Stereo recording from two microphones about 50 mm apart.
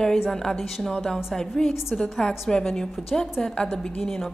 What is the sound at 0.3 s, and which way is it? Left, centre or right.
A woman's voice, centre.